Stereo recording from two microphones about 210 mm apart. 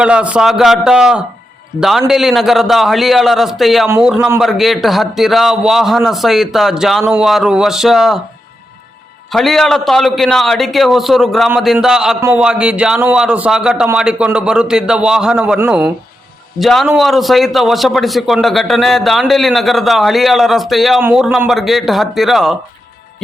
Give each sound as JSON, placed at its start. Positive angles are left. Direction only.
{"t": 0.0, "sound": "a man's voice", "side_deg": -5}
{"t": 3.8, "sound": "a man's voice", "side_deg": -10}
{"t": 4.4, "sound": "a man's voice", "side_deg": 0}
{"t": 9.3, "sound": "a man's voice", "side_deg": 0}